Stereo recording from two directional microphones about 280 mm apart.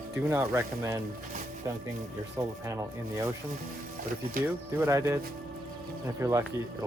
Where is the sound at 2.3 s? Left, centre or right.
Centre.